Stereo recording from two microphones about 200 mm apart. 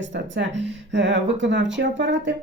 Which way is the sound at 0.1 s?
65° right (ahead or behind).